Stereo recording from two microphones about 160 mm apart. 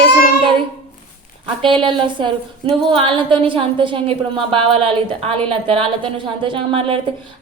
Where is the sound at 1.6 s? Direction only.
30° right (ahead or behind).